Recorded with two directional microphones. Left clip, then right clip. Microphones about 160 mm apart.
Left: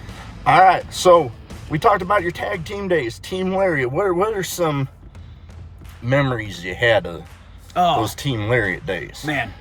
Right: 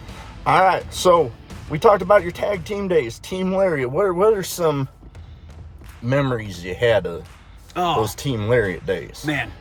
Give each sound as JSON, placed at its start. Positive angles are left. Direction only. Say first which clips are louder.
{"t": 0.4, "sound": "speech", "louder": "left 3 dB", "side_deg": -35}
{"t": 6.1, "sound": "speech", "louder": "left 2 dB", "side_deg": -25}
{"t": 7.7, "sound": "speech", "louder": "left 3 dB", "side_deg": 15}
{"t": 8.3, "sound": "speech", "louder": "even", "side_deg": -30}
{"t": 9.2, "sound": "speech", "louder": "left 2 dB", "side_deg": 15}